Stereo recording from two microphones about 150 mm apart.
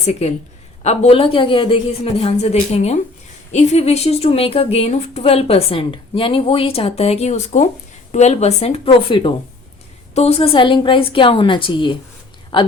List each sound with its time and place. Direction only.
0.0 s a woman's voice: 50° left (ahead or behind); by 12.7 s 30° left (ahead or behind)